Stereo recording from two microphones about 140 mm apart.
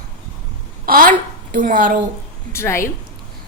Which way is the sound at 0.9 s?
85° right.